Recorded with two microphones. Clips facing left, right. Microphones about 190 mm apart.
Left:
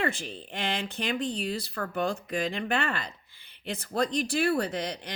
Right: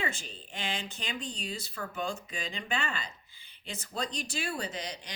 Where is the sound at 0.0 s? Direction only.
60° left (ahead or behind).